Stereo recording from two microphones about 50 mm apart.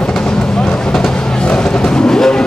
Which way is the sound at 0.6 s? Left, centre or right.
Left.